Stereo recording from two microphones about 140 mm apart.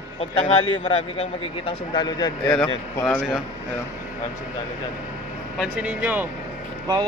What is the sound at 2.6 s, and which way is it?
Speech, 10° left (ahead or behind).